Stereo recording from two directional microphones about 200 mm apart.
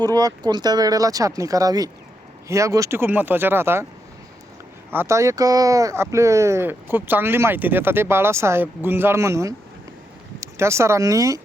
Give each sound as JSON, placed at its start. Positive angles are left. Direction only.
{"t": 0.0, "sound": "speech", "side_deg": -20}
{"t": 4.9, "sound": "speech", "side_deg": -10}